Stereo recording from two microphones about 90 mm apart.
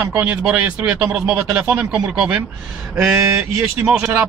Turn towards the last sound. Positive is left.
turn(degrees=-30)  # may be behind; listen again after turning